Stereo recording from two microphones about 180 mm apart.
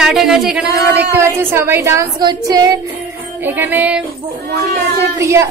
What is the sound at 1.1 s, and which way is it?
A woman's voice, 10° right (ahead or behind).